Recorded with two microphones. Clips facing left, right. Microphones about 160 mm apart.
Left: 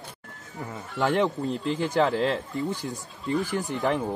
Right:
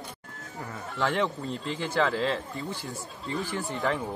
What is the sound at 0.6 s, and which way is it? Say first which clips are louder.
Speech: left 3 dB; 20° left (ahead or behind).